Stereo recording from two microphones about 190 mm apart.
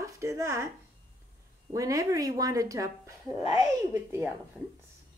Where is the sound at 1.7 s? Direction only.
15° right (ahead or behind).